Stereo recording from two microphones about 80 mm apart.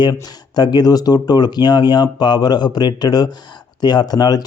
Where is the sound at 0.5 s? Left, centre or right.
Left.